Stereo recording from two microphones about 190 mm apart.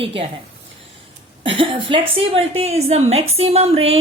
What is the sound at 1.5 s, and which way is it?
A woman's voice, 25° right (ahead or behind).